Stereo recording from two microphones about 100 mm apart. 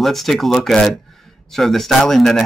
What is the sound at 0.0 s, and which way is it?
Speech, centre (ahead or behind).